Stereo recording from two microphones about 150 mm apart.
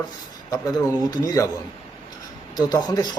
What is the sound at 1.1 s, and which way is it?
Speech, 25° left (ahead or behind).